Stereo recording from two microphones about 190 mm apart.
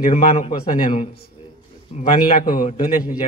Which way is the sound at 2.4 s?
45° left (ahead or behind).